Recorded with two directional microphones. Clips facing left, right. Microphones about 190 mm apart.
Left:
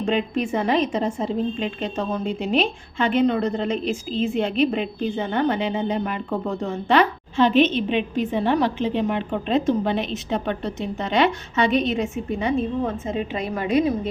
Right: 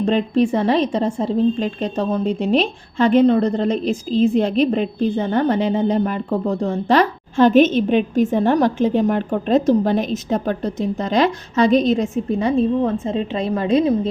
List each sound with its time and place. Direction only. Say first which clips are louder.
0.0 s a woman's voice: right 6 dB; 35° right (ahead or behind)